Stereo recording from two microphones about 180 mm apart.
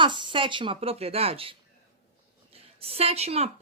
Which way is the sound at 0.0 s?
25° right (ahead or behind).